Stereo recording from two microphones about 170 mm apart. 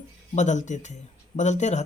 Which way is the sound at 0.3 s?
45° left (ahead or behind).